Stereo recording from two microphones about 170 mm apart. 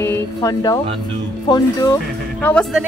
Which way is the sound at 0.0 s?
15° left (ahead or behind).